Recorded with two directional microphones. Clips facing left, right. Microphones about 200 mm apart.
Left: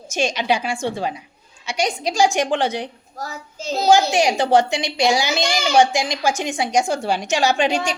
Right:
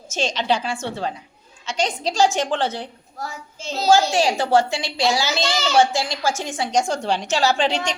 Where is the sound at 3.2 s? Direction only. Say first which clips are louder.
Left 1 dB; 40° left (ahead or behind).